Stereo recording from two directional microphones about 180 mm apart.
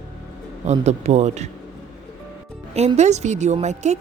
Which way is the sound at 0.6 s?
40° right (ahead or behind).